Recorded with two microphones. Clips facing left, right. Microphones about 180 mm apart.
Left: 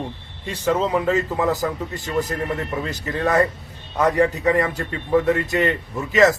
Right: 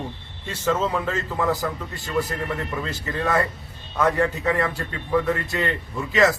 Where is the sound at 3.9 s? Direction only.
15° left (ahead or behind).